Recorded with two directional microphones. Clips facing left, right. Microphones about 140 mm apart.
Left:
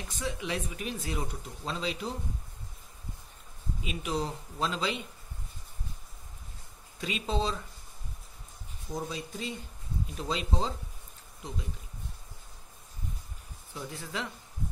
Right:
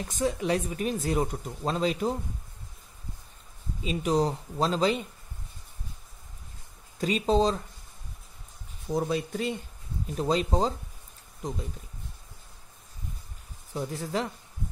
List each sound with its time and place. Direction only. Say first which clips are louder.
0.1 s speech: right 8 dB; 40° right (ahead or behind)
3.8 s speech: right 8 dB; 35° right (ahead or behind)
7.0 s speech: right 8 dB; 40° right (ahead or behind)
8.9 s speech: right 8 dB; 60° right (ahead or behind)
10.1 s speech: right 8 dB; 45° right (ahead or behind)
13.7 s speech: right 7 dB; 40° right (ahead or behind)